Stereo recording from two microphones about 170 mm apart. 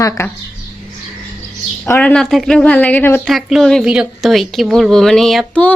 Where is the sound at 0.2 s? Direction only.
15° left (ahead or behind).